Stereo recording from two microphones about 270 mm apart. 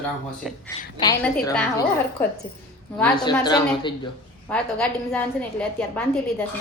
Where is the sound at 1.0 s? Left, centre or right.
Centre.